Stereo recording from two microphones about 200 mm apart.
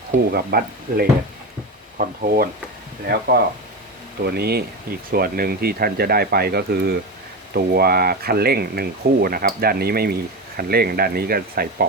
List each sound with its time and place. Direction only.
0.3 s speech: 50° right (ahead or behind)